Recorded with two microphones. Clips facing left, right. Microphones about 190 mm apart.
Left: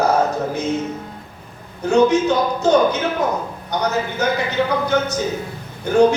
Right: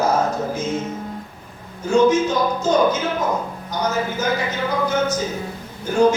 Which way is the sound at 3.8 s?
65° left (ahead or behind).